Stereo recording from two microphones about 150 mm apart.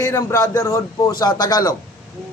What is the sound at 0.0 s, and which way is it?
Speech, 20° left (ahead or behind).